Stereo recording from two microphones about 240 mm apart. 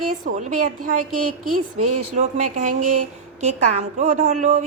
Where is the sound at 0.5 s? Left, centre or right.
Right.